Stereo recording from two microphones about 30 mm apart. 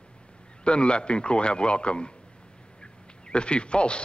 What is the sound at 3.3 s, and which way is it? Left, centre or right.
Speech, left.